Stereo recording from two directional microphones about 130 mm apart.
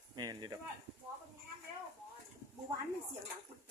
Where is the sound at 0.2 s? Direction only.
30° right (ahead or behind).